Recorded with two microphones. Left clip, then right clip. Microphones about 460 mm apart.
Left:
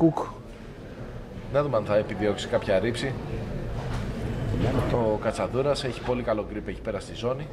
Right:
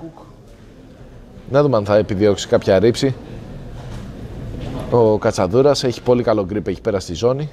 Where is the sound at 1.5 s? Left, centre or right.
Right.